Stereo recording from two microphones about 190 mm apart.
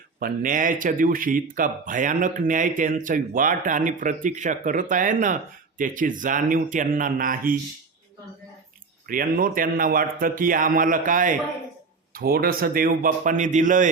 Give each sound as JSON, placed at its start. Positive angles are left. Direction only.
{"t": 0.2, "sound": "speech", "side_deg": -45}
{"t": 9.0, "sound": "speech", "side_deg": -50}